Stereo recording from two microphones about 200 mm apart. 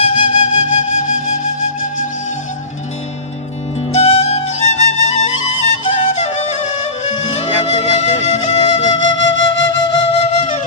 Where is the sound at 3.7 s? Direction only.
30° left (ahead or behind).